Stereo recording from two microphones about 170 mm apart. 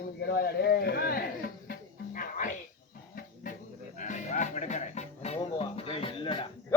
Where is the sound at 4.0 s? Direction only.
50° left (ahead or behind).